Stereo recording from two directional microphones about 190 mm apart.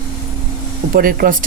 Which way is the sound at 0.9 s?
50° right (ahead or behind).